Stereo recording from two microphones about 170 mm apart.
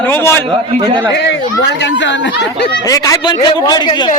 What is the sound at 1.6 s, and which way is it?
Speech, 90° left.